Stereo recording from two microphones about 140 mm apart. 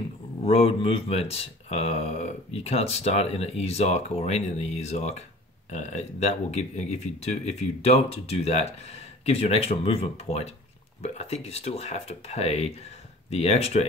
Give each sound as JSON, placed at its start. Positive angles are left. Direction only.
{"t": 0.4, "sound": "speech", "side_deg": 45}